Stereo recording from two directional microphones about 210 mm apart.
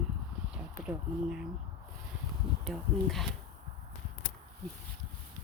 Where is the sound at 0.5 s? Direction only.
5° right (ahead or behind).